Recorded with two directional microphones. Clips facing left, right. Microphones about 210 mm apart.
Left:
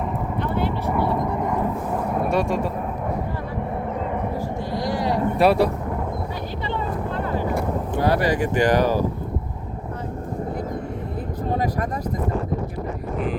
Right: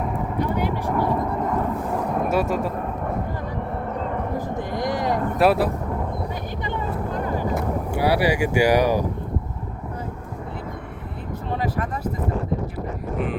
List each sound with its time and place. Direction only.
0.3 s a sound: 10° right (ahead or behind)
1.4 s vehicle: 5° left (ahead or behind)
2.3 s speech: 5° right (ahead or behind)
4.4 s vehicle: 20° right (ahead or behind)
5.4 s speech: centre (ahead or behind)
7.5 s speech: 10° right (ahead or behind)
11.5 s speech: 40° left (ahead or behind)